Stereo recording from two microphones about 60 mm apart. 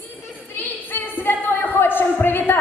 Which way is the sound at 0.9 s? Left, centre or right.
Left.